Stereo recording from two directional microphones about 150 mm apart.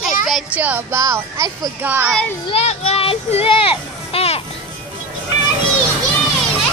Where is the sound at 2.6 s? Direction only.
45° left (ahead or behind).